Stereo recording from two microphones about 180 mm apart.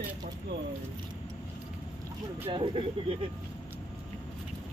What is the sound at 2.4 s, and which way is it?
Speech, 30° right (ahead or behind).